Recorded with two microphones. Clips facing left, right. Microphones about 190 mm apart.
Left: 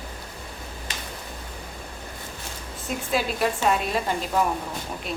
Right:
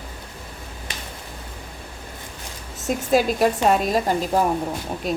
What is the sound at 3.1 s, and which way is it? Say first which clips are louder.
A woman's voice: right 6 dB; 40° right (ahead or behind).